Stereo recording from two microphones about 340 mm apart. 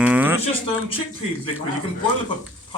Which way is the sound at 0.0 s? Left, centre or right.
Centre.